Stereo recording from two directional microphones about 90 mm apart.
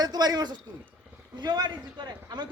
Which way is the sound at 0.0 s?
50° right (ahead or behind).